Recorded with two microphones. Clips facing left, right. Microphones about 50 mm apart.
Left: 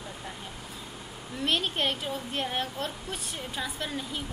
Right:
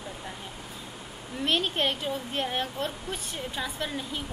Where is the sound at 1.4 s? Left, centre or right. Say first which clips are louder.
Right 1 dB; centre.